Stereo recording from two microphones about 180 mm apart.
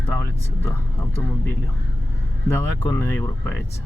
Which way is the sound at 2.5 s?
15° left (ahead or behind).